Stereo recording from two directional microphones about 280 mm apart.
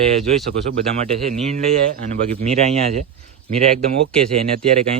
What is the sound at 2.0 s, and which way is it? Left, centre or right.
Speech, right.